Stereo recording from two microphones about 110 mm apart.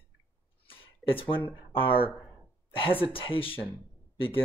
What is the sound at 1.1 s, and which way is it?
Speech, 55° left (ahead or behind).